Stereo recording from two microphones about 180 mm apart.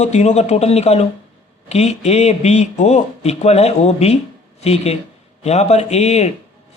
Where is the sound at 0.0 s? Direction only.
40° left (ahead or behind).